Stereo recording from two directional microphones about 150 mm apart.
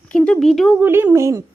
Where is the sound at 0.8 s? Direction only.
15° right (ahead or behind).